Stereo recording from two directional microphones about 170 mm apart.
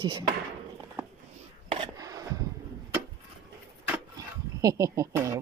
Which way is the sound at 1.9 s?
20° right (ahead or behind).